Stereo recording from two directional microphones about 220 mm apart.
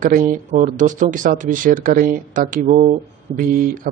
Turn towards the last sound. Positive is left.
turn(degrees=-40)  # may be behind; listen again after turning